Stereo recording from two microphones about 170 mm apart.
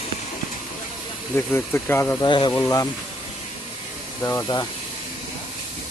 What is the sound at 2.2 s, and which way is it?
Speech, 25° left (ahead or behind).